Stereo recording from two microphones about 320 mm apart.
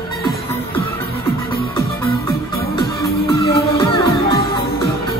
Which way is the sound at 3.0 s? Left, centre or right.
Centre.